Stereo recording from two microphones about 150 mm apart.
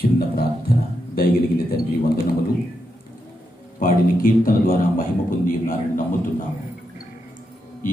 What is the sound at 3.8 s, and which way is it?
A man's voice, 70° left (ahead or behind).